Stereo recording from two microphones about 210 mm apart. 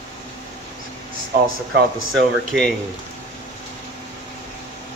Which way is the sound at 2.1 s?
Centre (ahead or behind).